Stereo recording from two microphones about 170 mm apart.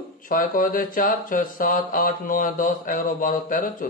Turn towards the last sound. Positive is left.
turn(degrees=55)  # may be behind; listen again after turning